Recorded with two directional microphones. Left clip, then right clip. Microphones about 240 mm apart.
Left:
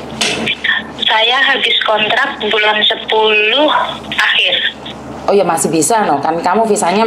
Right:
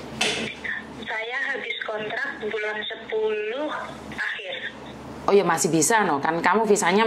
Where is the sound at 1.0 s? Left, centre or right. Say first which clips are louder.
Left 18 dB; left.